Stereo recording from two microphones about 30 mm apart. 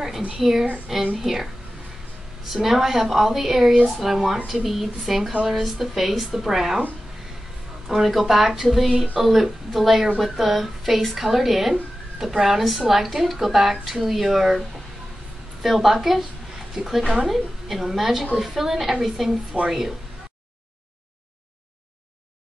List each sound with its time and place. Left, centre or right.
0.4 s a woman's voice: centre
2.5 s a woman's voice: centre
7.9 s a woman's voice: centre
17.0 s speech: right
17.3 s a woman's voice: centre
19.6 s speech: right